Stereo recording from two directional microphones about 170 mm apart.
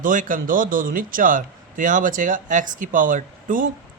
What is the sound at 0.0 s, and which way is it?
A man's voice, 50° right (ahead or behind).